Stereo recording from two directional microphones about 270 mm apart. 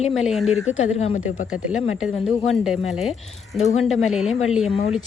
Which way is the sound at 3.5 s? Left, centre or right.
Left.